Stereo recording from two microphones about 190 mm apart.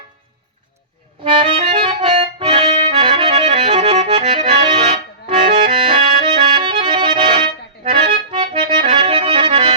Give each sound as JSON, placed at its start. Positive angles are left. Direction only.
{"t": 1.2, "sound": "accordion", "side_deg": -30}